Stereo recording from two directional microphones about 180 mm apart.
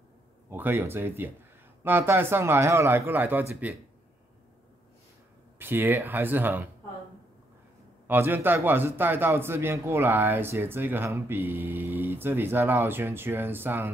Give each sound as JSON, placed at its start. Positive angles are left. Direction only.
{"t": 0.5, "sound": "a man's voice", "side_deg": -10}
{"t": 5.6, "sound": "a man's voice", "side_deg": -10}
{"t": 8.1, "sound": "a man's voice", "side_deg": -10}